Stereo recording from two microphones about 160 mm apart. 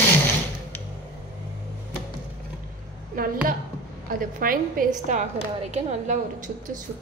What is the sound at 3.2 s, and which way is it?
A woman's voice, 65° right (ahead or behind).